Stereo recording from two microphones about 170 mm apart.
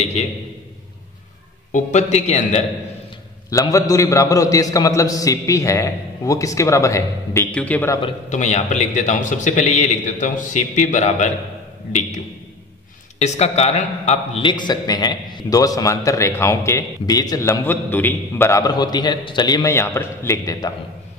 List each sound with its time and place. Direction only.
0.0 s a man's voice: 40° left (ahead or behind)
1.7 s a man's voice: 45° left (ahead or behind)
3.4 s a man's voice: 20° left (ahead or behind)
8.3 s a man's voice: 45° left (ahead or behind)
13.2 s a man's voice: 40° left (ahead or behind); by 20.7 s 20° left (ahead or behind)